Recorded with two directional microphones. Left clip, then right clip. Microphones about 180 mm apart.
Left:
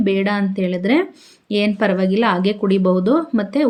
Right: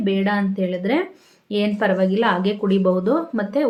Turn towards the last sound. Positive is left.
turn(degrees=35)  # may be behind; listen again after turning